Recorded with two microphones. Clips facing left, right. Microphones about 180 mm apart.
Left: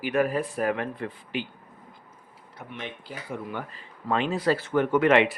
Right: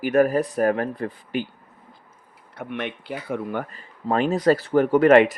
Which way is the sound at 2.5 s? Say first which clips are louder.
Right 8 dB; 65° right (ahead or behind).